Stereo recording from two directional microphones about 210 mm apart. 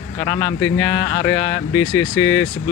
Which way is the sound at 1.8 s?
65° left (ahead or behind).